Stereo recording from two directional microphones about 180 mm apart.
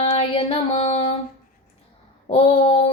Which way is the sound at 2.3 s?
35° left (ahead or behind).